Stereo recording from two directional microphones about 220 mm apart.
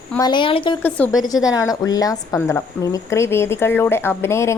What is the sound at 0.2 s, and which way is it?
Speech, 20° left (ahead or behind).